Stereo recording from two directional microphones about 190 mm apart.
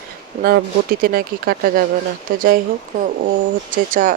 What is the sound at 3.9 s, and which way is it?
Speech, 45° right (ahead or behind).